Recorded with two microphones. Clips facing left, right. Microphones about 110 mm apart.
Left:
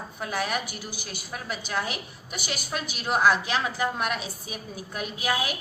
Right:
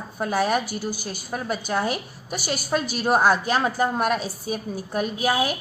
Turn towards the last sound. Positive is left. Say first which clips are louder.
# right 6 dB
turn(degrees=-40)  # may be behind; listen again after turning